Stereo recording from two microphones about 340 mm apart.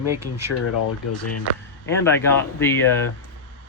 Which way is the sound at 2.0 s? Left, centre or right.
Centre.